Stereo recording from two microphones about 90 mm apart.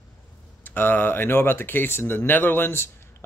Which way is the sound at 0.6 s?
20° left (ahead or behind).